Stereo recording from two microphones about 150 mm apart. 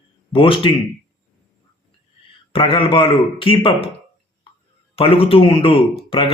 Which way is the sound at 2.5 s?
35° left (ahead or behind).